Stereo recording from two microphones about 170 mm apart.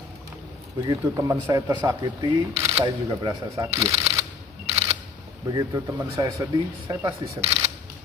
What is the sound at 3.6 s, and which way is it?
Speech, 35° right (ahead or behind).